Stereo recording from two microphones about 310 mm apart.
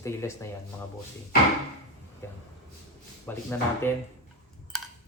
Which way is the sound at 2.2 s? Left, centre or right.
Centre.